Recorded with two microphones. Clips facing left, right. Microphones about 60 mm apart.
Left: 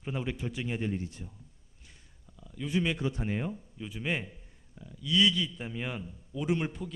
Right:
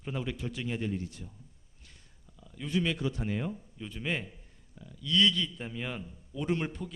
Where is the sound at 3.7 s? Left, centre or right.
Centre.